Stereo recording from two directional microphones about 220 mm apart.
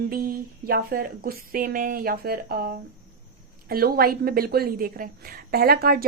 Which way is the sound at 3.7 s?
45° right (ahead or behind).